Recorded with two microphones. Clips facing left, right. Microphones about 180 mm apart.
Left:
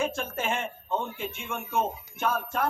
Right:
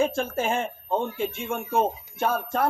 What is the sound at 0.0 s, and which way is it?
Speech, 35° right (ahead or behind).